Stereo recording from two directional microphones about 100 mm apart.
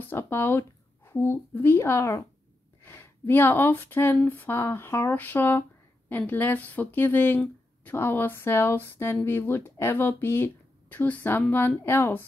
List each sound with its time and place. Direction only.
0.0 s speech: 20° left (ahead or behind)